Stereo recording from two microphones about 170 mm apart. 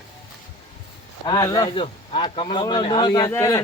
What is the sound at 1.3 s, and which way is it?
A man's voice, 25° left (ahead or behind).